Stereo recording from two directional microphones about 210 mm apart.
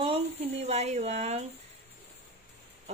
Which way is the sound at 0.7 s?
30° right (ahead or behind).